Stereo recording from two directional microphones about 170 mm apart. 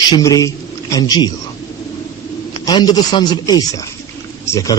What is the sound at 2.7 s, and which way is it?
Speech, 25° left (ahead or behind).